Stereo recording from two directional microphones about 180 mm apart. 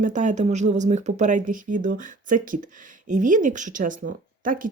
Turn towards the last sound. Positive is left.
turn(degrees=-50)  # may be behind; listen again after turning